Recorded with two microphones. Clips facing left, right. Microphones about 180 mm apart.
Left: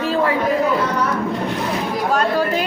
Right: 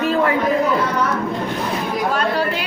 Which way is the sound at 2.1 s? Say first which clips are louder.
Left 5 dB; 45° left (ahead or behind).